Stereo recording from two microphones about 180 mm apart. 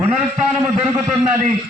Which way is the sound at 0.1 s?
5° right (ahead or behind).